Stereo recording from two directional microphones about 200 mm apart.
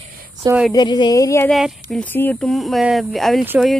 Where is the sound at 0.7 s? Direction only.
20° left (ahead or behind).